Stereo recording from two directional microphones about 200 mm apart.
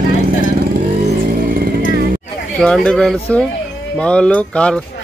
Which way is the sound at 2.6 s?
5° left (ahead or behind).